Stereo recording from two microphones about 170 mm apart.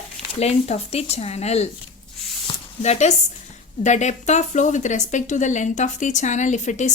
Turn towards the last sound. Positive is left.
turn(degrees=45)  # may be behind; listen again after turning